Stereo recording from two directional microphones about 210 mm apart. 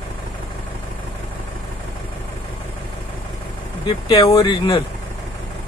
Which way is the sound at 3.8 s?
20° left (ahead or behind).